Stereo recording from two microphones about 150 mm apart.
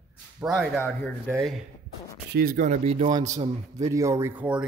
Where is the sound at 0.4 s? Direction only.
10° right (ahead or behind).